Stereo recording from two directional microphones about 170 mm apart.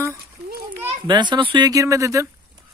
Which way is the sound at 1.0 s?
25° right (ahead or behind).